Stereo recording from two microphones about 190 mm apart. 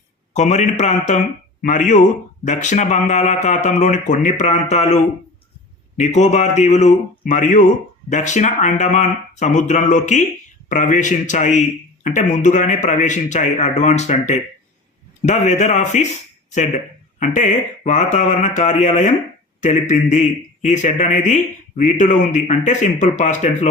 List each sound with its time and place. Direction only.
0.3 s speech: 35° left (ahead or behind)
6.0 s speech: 40° left (ahead or behind)